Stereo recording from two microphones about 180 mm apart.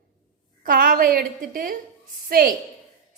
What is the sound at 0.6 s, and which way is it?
A woman's voice, 50° right (ahead or behind).